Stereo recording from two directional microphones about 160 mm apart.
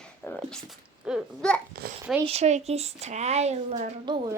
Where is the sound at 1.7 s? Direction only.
70° right (ahead or behind).